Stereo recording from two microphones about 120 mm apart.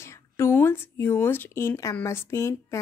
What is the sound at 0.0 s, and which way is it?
Speech, 20° left (ahead or behind).